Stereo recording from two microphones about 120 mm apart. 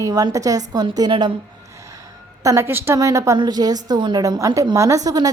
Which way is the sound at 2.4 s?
25° right (ahead or behind).